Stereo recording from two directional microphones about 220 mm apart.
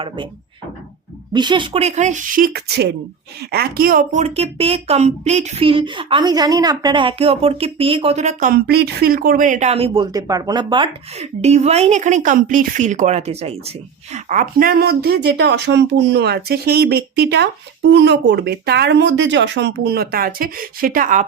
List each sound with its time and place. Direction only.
1.3 s a woman's voice: 20° right (ahead or behind); by 21.2 s 35° right (ahead or behind)